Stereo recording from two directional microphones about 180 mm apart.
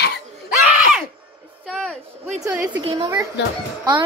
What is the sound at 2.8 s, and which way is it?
Speech, 30° right (ahead or behind).